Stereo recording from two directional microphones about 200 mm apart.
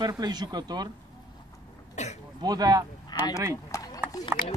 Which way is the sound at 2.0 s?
35° left (ahead or behind).